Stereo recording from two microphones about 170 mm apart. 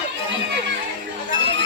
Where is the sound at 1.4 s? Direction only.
90° right.